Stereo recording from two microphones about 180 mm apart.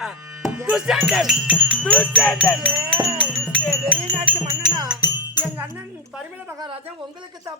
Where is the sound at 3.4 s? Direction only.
Centre (ahead or behind).